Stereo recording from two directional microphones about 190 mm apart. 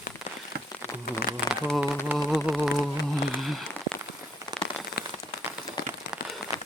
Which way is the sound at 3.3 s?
Centre (ahead or behind).